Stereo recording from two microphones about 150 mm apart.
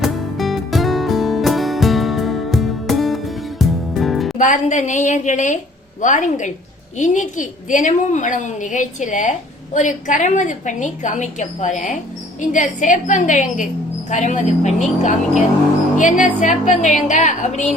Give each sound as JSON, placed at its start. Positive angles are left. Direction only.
{"t": 0.0, "sound": "music", "side_deg": 0}
{"t": 4.4, "sound": "a woman's voice", "side_deg": 55}